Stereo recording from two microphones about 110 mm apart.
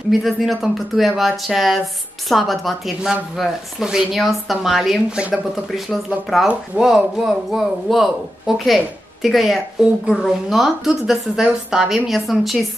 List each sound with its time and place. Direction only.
0.1 s a woman's voice: centre (ahead or behind)